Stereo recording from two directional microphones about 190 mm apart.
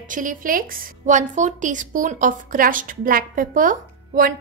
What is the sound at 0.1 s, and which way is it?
A woman's voice, 45° right (ahead or behind).